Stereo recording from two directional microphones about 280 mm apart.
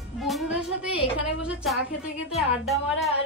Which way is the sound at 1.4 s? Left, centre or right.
Centre.